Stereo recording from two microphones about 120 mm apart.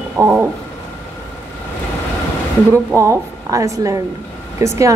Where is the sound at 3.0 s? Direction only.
25° right (ahead or behind).